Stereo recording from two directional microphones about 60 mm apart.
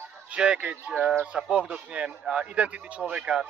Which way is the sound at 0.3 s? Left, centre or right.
Centre.